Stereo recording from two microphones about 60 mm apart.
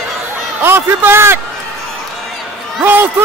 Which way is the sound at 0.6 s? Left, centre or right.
Right.